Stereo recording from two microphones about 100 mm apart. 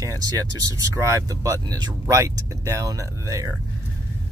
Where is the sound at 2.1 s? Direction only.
30° right (ahead or behind).